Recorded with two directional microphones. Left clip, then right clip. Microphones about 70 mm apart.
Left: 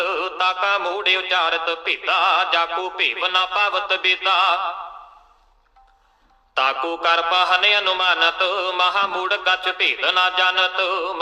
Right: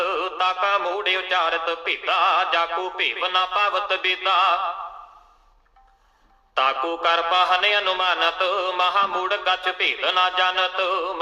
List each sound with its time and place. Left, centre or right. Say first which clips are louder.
0.0 s music: left 2 dB; left
6.5 s music: left 1 dB; left